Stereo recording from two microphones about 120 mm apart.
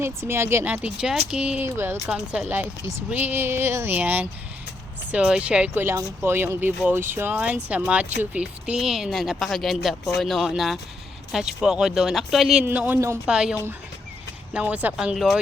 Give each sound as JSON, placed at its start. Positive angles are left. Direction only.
{"t": 0.0, "sound": "speech", "side_deg": -20}
{"t": 2.1, "sound": "speech", "side_deg": -5}
{"t": 2.5, "sound": "speech", "side_deg": -15}
{"t": 12.6, "sound": "speech", "side_deg": -15}